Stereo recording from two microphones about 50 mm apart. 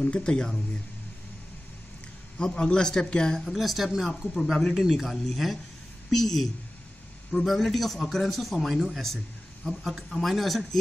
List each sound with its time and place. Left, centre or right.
0.0 s speech: centre
2.3 s speech: centre
3.5 s a man's voice: centre